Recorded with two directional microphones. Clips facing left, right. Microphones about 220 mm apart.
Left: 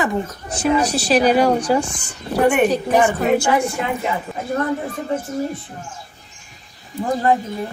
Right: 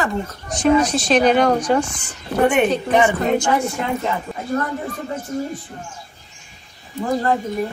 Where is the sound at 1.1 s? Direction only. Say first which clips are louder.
Left 1 dB; 10° left (ahead or behind).